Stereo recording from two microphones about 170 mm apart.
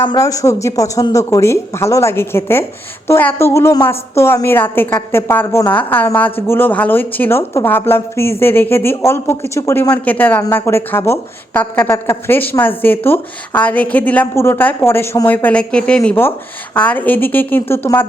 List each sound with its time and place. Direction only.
0.0 s a woman's voice: 25° left (ahead or behind)